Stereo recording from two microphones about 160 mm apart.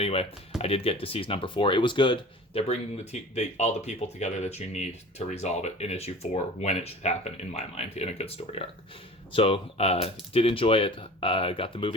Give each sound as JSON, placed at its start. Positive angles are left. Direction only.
{"t": 0.0, "sound": "speech", "side_deg": 40}